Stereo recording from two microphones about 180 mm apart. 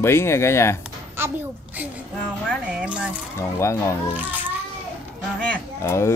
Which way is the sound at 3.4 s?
15° left (ahead or behind).